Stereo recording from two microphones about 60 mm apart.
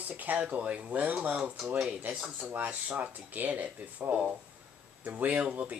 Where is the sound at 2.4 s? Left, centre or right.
Right.